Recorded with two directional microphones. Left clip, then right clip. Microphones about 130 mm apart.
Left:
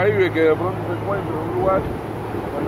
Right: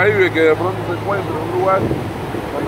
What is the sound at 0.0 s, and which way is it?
Speech, 20° left (ahead or behind).